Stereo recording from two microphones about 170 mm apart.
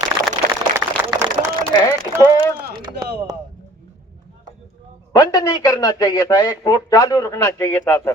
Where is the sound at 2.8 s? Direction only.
25° right (ahead or behind).